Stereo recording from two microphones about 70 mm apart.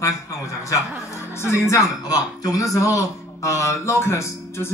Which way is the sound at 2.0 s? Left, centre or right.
Left.